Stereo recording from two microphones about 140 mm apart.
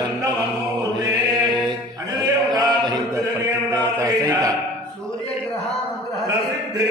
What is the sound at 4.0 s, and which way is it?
Chant, 25° right (ahead or behind).